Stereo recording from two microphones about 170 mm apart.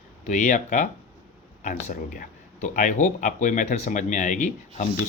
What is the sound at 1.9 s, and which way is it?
Speech, 50° left (ahead or behind).